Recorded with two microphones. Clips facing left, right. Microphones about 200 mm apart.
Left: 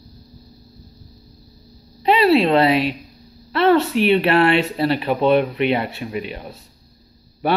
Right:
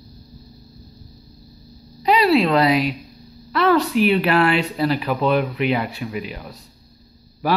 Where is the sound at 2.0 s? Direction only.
30° left (ahead or behind).